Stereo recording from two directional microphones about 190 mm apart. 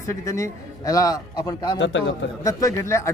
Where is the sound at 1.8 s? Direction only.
80° left.